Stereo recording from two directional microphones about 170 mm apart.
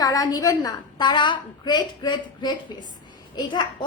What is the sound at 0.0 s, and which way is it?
A woman's voice, 20° left (ahead or behind).